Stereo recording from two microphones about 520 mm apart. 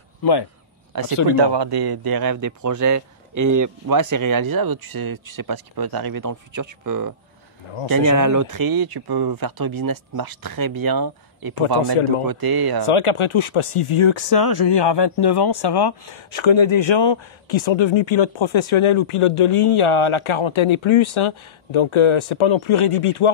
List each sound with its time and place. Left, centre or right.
0.2 s speech: left
1.4 s speech: right
12.8 s speech: left
14.3 s speech: left
16.3 s speech: left